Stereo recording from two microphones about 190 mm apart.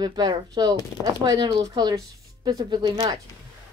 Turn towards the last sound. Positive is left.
turn(degrees=-20)  # may be behind; listen again after turning